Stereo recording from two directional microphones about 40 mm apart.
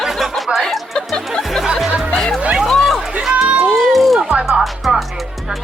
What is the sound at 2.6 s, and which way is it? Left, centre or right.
Chatter, centre.